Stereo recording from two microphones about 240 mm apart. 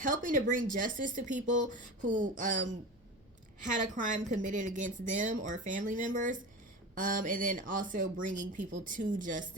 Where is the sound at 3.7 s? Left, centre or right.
Right.